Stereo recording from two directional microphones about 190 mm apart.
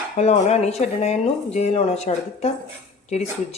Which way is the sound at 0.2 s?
35° left (ahead or behind).